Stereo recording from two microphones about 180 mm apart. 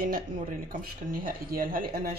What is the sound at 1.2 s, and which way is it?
Speech, 50° right (ahead or behind).